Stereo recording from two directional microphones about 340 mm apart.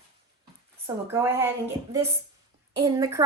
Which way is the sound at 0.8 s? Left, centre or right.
Centre.